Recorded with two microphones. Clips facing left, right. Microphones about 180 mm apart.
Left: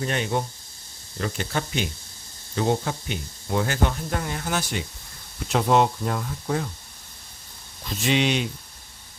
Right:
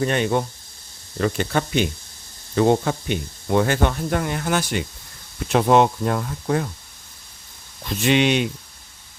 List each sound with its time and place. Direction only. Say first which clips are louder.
0.0 s speech: right 5 dB; 65° right (ahead or behind)
8.0 s speech: right 4 dB; 60° right (ahead or behind)